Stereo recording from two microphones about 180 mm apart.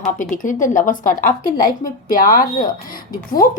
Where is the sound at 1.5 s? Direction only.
20° left (ahead or behind).